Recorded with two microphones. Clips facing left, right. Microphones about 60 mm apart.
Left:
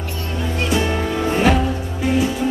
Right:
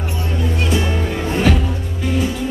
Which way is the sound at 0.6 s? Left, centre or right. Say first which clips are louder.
Left 2 dB; centre.